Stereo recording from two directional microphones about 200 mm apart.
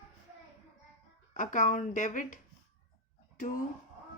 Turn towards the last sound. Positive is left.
turn(degrees=40)  # may be behind; listen again after turning